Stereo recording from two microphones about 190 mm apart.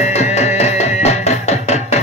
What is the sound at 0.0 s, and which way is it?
Music, 35° left (ahead or behind).